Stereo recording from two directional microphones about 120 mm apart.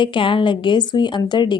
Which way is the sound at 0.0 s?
45° left (ahead or behind).